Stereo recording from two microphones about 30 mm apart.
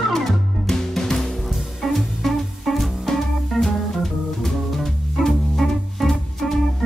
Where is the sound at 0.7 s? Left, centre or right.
Centre.